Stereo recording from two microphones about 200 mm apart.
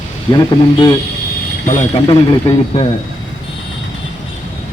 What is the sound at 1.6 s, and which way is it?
Speech, 35° left (ahead or behind).